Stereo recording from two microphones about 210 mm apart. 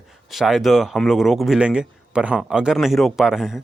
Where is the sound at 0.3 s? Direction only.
Centre (ahead or behind).